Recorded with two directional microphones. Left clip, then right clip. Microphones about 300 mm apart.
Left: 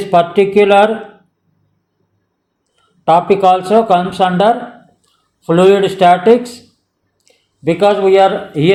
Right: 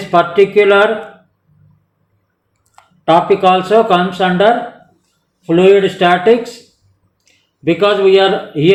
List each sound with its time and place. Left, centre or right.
0.1 s speech: left
3.0 s speech: left